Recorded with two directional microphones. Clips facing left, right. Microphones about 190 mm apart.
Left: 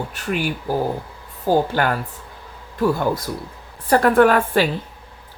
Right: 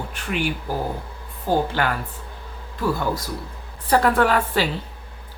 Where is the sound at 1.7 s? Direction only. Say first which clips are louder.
Left 3 dB; 45° left (ahead or behind).